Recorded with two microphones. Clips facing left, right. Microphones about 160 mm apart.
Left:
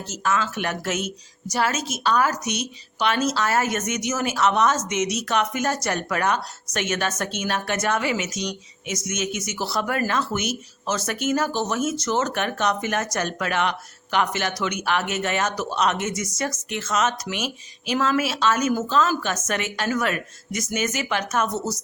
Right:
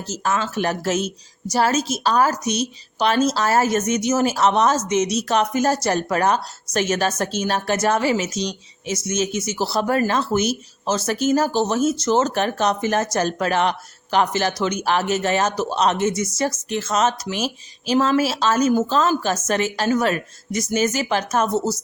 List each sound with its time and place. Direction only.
0.0 s speech: 35° right (ahead or behind)